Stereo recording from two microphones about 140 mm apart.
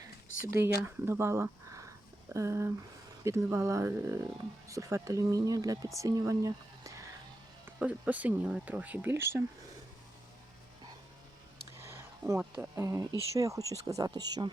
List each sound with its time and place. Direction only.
0.5 s speech: 15° right (ahead or behind)
7.8 s speech: 10° right (ahead or behind)
11.8 s a sound: 15° right (ahead or behind)
12.7 s speech: 20° right (ahead or behind)